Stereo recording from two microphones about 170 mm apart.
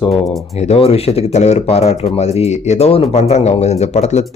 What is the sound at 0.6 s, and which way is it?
Speech, 35° left (ahead or behind).